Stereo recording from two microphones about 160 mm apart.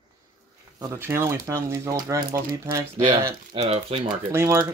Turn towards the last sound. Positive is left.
turn(degrees=-15)  # may be behind; listen again after turning